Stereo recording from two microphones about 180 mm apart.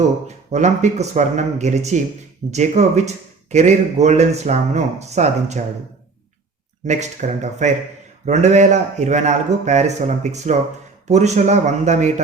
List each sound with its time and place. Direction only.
0.3 s a man's voice: 40° right (ahead or behind)
6.8 s a man's voice: 40° right (ahead or behind)